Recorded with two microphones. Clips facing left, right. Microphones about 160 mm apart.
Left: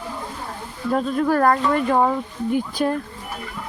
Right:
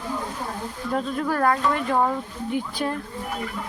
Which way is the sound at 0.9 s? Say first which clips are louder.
Left 5 dB; 45° left (ahead or behind).